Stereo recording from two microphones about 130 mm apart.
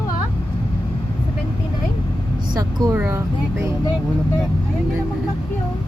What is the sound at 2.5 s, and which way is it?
Speech, 30° right (ahead or behind).